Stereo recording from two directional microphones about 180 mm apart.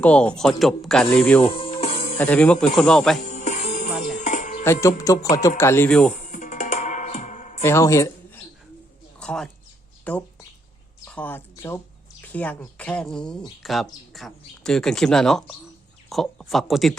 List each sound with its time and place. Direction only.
0.0 s speech: 5° left (ahead or behind)
1.4 s music: 30° left (ahead or behind)
2.1 s speech: 10° left (ahead or behind)
3.2 s music: 45° left (ahead or behind)
4.6 s speech: 15° left (ahead or behind)
6.2 s music: 45° left (ahead or behind)
7.6 s speech: 15° left (ahead or behind)
9.2 s speech: 5° left (ahead or behind)